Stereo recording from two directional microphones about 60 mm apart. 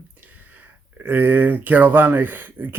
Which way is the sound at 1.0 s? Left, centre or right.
Right.